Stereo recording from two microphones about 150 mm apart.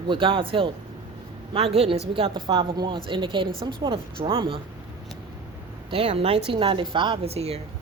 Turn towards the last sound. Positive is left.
turn(degrees=-40)  # may be behind; listen again after turning